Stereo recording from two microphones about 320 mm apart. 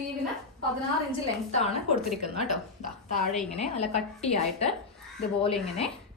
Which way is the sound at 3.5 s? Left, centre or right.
Centre.